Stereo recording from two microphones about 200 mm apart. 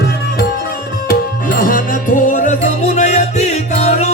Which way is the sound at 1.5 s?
45° left (ahead or behind).